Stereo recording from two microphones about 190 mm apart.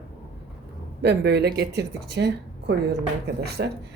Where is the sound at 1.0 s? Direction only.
60° right (ahead or behind).